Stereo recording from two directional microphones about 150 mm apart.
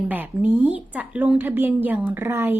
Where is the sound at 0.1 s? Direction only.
10° right (ahead or behind).